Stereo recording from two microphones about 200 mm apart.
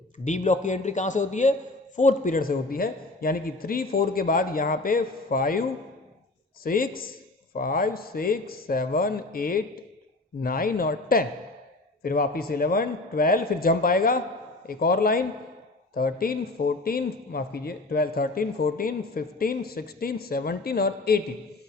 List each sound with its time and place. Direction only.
0.3 s a man's voice: 40° left (ahead or behind)